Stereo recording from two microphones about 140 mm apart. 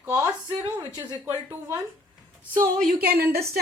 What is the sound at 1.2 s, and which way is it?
Speech, 15° right (ahead or behind).